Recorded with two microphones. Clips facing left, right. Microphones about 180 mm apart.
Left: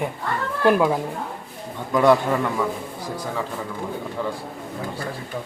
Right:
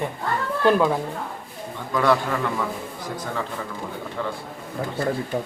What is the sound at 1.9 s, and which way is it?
Speech, 20° left (ahead or behind).